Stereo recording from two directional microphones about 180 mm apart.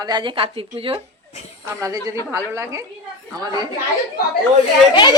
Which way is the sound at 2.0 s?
15° right (ahead or behind).